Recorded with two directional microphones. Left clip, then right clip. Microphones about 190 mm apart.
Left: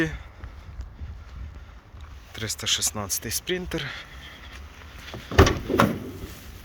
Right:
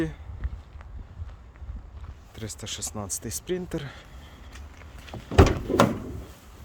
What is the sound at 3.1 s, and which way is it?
Speech, 25° right (ahead or behind).